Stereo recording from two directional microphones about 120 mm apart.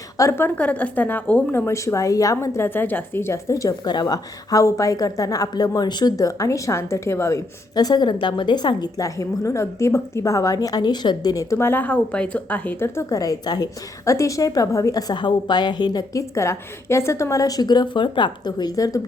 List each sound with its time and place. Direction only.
0.2 s a woman's voice: 20° left (ahead or behind)